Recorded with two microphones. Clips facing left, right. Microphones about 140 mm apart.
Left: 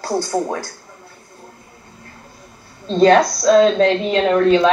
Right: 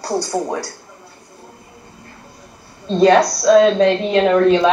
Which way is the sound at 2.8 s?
5° right (ahead or behind).